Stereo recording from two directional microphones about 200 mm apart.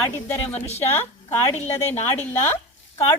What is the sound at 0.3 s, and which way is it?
A woman's voice, 10° left (ahead or behind).